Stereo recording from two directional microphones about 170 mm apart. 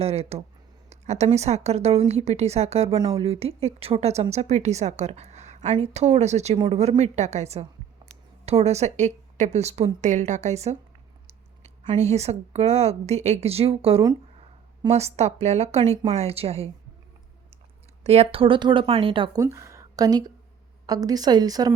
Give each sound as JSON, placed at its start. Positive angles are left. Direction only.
{"t": 0.0, "sound": "a woman's voice", "side_deg": -35}
{"t": 18.0, "sound": "a woman's voice", "side_deg": -40}
{"t": 19.4, "sound": "a woman's voice", "side_deg": -15}